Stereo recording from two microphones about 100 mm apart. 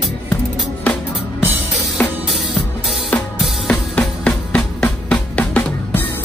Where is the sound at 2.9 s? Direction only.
Centre (ahead or behind).